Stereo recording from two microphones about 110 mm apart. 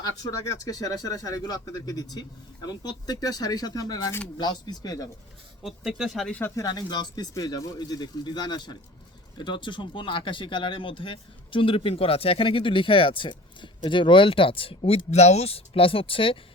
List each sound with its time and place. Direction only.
0.0 s speech: 35° left (ahead or behind)
5.6 s speech: 5° right (ahead or behind)
6.4 s speech: 35° left (ahead or behind); by 16.4 s 55° left (ahead or behind)